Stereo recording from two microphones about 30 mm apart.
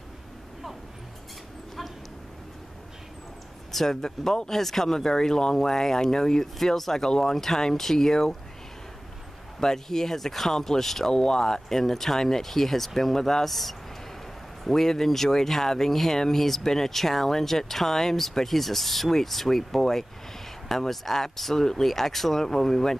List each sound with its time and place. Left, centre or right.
3.7 s speech: centre
6.4 s speech: centre
7.3 s speech: centre
9.6 s speech: centre
11.1 s speech: left